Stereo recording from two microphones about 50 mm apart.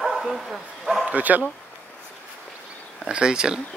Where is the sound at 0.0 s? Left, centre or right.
Centre.